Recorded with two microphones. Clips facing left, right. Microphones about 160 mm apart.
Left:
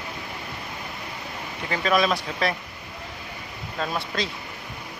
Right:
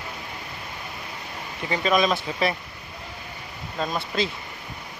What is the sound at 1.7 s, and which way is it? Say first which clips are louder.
Speech: right 1 dB; centre (ahead or behind).